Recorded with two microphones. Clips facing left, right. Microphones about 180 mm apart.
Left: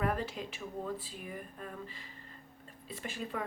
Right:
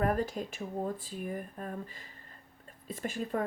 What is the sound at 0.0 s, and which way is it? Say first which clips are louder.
Speech: right 4 dB; 45° right (ahead or behind).